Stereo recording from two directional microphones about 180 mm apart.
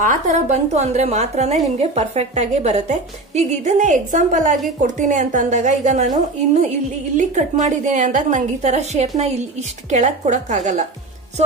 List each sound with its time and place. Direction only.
0.0 s a woman's voice: 45° right (ahead or behind)